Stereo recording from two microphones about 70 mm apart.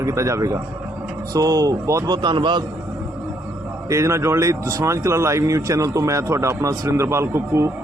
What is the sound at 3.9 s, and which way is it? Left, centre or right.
Speech, right.